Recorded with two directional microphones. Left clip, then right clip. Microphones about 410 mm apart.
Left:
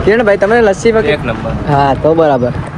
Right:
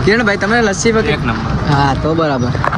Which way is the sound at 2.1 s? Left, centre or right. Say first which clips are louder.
Left 6 dB; left.